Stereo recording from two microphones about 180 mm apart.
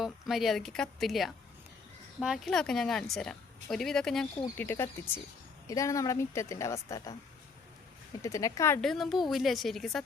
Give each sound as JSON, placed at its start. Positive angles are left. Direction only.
{"t": 0.0, "sound": "a woman's voice", "side_deg": 0}
{"t": 8.2, "sound": "a woman's voice", "side_deg": 15}
{"t": 8.8, "sound": "a woman's voice", "side_deg": 0}